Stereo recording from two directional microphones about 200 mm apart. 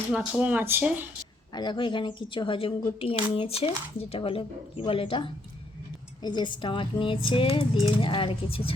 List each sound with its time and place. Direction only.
0.1 s speech: 5° right (ahead or behind)
1.5 s speech: 20° left (ahead or behind)